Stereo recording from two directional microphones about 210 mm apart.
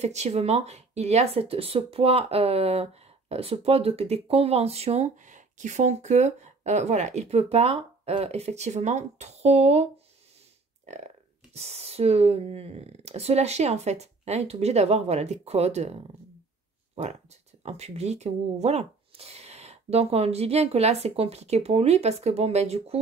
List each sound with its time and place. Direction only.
0.0 s speech: 30° right (ahead or behind)
10.9 s speech: 30° right (ahead or behind)